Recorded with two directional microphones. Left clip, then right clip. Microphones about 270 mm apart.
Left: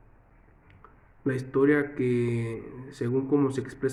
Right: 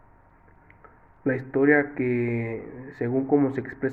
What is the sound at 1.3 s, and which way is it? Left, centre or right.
A man's voice, centre.